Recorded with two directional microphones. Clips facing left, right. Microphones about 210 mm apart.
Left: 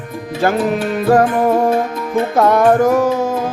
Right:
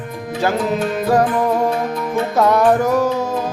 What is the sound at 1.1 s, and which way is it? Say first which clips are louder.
Music: left 4 dB; 55° left (ahead or behind).